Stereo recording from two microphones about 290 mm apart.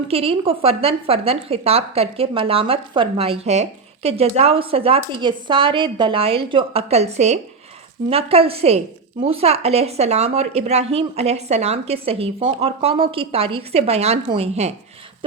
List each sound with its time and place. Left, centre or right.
0.1 s a woman's voice: centre